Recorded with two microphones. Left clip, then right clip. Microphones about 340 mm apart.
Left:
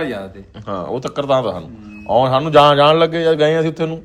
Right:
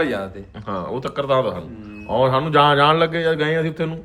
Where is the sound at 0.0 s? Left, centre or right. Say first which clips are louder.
Right 2 dB; centre.